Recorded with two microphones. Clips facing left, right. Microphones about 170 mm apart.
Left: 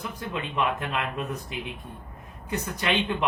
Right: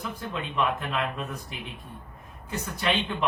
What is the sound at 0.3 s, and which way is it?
Speech, 15° left (ahead or behind).